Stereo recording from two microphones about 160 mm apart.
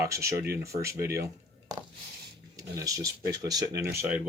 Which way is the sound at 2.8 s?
20° right (ahead or behind).